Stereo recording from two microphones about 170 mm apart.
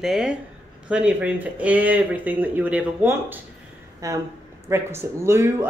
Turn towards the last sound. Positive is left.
turn(degrees=-15)  # may be behind; listen again after turning